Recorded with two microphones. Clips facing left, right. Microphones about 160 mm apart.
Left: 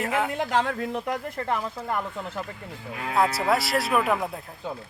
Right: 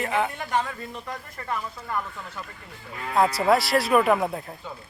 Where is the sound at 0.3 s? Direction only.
90° left; by 1.5 s 65° left (ahead or behind).